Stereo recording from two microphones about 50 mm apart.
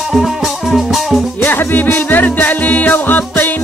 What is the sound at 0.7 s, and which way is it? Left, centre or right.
Music, centre.